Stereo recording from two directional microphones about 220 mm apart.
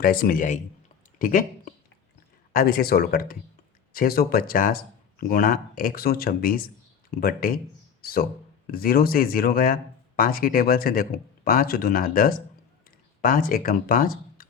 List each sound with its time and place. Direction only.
0.0 s speech: 40° left (ahead or behind)